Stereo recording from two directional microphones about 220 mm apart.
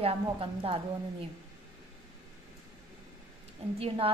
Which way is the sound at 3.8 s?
25° right (ahead or behind).